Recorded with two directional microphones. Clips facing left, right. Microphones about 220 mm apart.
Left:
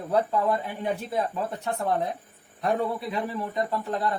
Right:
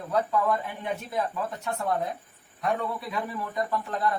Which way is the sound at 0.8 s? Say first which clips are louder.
Left 4 dB; 30° left (ahead or behind).